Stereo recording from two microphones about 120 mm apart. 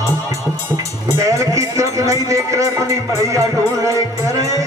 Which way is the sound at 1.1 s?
25° right (ahead or behind).